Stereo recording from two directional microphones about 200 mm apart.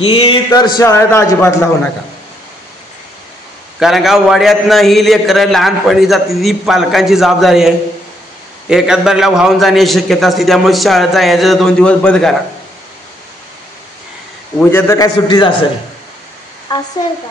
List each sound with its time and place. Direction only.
0.0 s a man's voice: 25° left (ahead or behind)
3.8 s a man's voice: centre (ahead or behind)
14.7 s a man's voice: 15° left (ahead or behind)
16.7 s a man's voice: 20° left (ahead or behind)